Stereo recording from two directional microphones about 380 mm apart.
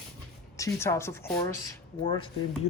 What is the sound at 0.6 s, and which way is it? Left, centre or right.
Speech, centre.